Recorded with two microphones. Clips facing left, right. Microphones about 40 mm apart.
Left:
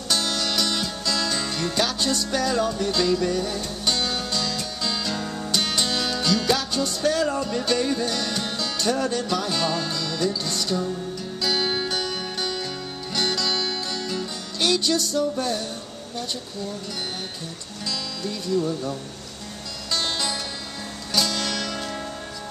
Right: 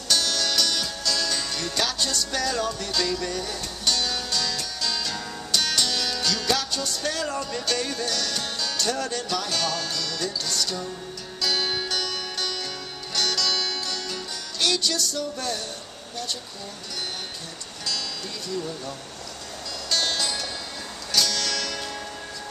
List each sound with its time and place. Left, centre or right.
0.1 s music: centre
5.6 s music: left
17.8 s speech: centre
19.9 s music: centre